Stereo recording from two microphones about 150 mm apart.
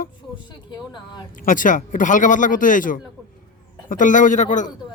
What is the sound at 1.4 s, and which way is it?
Speech, 60° left (ahead or behind).